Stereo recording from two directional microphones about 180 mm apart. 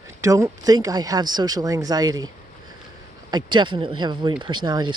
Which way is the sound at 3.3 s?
25° right (ahead or behind).